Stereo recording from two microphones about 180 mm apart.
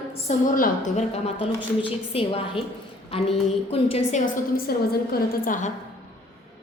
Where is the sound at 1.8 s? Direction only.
30° left (ahead or behind).